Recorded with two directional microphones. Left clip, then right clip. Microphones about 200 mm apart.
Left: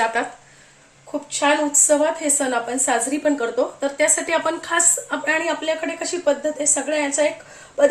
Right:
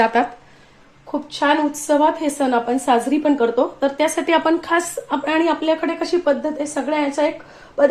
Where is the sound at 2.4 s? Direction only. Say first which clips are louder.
Right 3 dB; 30° right (ahead or behind).